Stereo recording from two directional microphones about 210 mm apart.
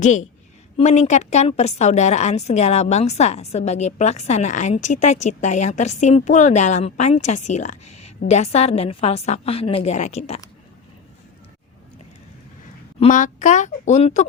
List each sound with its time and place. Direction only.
0.8 s a woman's voice: 35° left (ahead or behind)
13.0 s a woman's voice: 35° left (ahead or behind)